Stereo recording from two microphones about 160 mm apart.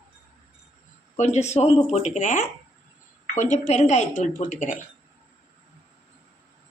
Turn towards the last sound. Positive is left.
turn(degrees=50)  # may be behind; listen again after turning